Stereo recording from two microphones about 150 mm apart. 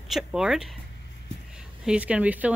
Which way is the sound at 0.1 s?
5° right (ahead or behind).